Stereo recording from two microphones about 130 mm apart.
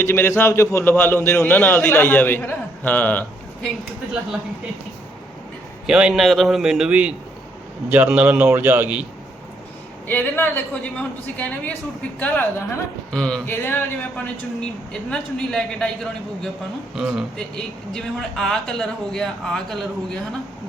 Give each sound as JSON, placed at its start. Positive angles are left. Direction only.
{"t": 0.0, "sound": "a man's voice", "side_deg": 20}
{"t": 5.8, "sound": "a man's voice", "side_deg": -5}
{"t": 10.1, "sound": "a man's voice", "side_deg": 15}
{"t": 15.1, "sound": "a man's voice", "side_deg": 5}